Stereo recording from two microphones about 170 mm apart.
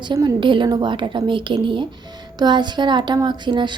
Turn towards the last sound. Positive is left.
turn(degrees=-25)  # may be behind; listen again after turning